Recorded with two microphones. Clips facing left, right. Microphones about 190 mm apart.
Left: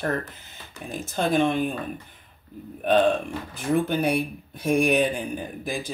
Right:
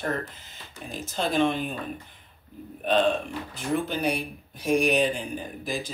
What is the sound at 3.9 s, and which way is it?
A man's voice, 55° left (ahead or behind).